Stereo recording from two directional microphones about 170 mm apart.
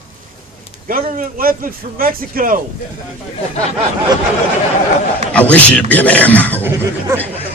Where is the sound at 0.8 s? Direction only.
55° right (ahead or behind).